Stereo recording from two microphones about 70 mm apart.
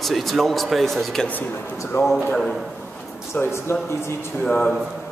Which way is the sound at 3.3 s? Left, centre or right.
Left.